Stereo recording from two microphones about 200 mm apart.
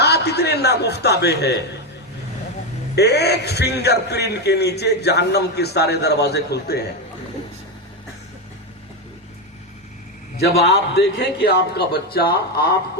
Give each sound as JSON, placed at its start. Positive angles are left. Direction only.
{"t": 0.0, "sound": "a man's voice", "side_deg": 55}
{"t": 2.9, "sound": "a man's voice", "side_deg": 55}
{"t": 10.9, "sound": "a man's voice", "side_deg": 55}